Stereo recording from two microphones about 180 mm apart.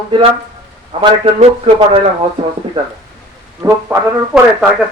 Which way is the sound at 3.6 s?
10° right (ahead or behind).